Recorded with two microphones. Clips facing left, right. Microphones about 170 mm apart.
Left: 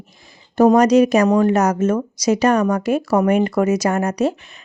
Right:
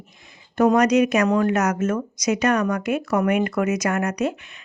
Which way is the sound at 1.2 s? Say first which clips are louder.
Left 4 dB; 20° left (ahead or behind).